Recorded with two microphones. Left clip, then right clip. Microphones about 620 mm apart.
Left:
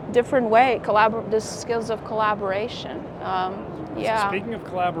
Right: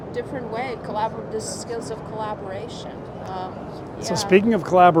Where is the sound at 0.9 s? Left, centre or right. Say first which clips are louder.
Left 7 dB; left.